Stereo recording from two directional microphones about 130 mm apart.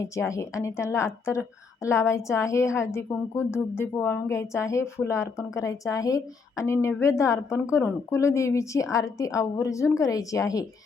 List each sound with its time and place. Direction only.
0.0 s a woman's voice: 25° left (ahead or behind)